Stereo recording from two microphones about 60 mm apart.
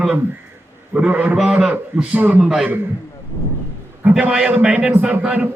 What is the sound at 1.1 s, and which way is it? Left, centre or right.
Speech, right.